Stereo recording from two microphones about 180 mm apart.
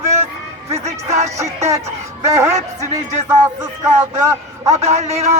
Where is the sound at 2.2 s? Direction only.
15° right (ahead or behind).